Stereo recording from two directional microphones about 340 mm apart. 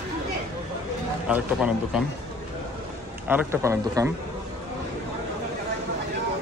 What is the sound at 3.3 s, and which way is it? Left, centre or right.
Speech, centre.